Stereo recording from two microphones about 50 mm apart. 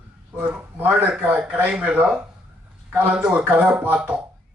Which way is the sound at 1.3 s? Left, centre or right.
Right.